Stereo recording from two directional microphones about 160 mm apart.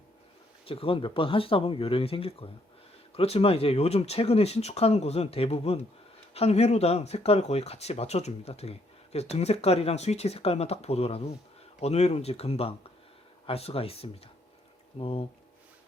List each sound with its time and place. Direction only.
0.6 s speech: 35° left (ahead or behind)